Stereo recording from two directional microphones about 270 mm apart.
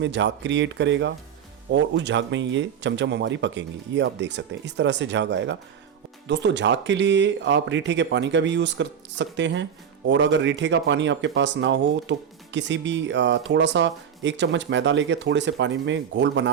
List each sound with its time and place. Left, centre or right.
0.0 s speech: right